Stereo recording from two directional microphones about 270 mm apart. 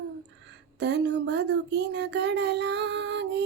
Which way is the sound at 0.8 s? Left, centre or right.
Right.